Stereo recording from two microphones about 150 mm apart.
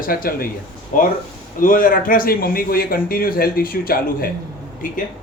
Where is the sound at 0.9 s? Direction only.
60° left (ahead or behind).